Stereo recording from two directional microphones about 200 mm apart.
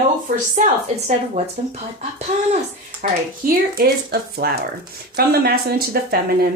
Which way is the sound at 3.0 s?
40° right (ahead or behind).